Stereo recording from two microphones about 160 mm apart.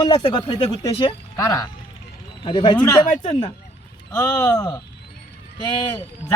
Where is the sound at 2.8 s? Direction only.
15° left (ahead or behind).